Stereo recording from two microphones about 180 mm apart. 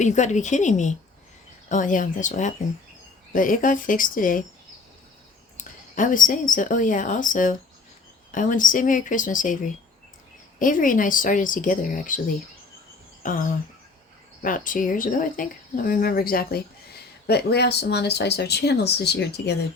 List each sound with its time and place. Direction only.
0.0 s speech: 40° left (ahead or behind)
5.5 s speech: 45° left (ahead or behind)
13.2 s speech: 50° left (ahead or behind)
14.4 s speech: 45° left (ahead or behind); by 19.5 s 65° left (ahead or behind)